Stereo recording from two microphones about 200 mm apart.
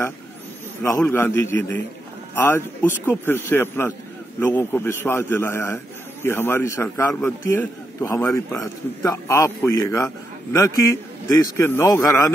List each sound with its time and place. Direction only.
0.8 s a man's voice: 15° left (ahead or behind)